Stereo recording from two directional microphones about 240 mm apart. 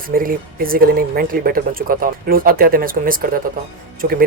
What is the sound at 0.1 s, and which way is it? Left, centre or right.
Speech, right.